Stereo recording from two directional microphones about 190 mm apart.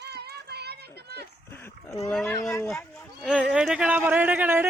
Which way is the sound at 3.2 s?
5° right (ahead or behind).